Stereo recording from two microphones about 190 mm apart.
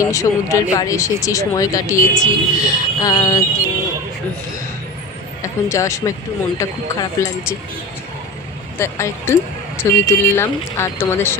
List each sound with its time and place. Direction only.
0.0 s speech: 15° left (ahead or behind)
5.4 s speech: 15° left (ahead or behind)
8.7 s speech: 15° left (ahead or behind)